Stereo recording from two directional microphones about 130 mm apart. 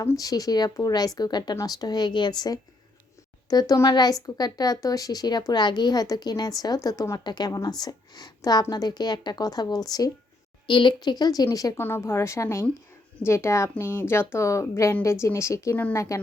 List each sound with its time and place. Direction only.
0.0 s a woman's voice: 25° left (ahead or behind)